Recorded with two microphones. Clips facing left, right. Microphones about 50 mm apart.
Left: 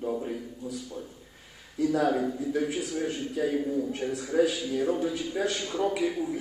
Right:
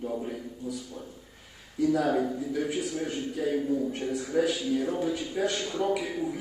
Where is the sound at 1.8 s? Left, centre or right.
Centre.